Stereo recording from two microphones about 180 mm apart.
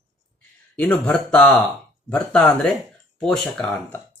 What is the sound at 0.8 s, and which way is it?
Speech, 5° left (ahead or behind).